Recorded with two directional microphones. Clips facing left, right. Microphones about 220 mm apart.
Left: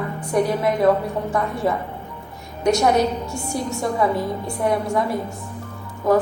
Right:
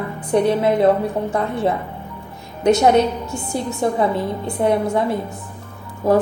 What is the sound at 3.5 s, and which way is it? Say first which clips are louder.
A woman's voice: right 3 dB; 25° right (ahead or behind).